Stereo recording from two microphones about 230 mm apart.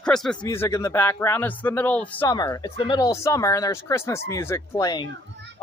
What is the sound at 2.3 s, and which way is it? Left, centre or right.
Speech, centre.